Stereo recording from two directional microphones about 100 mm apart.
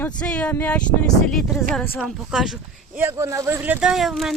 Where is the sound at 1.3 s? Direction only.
Centre (ahead or behind).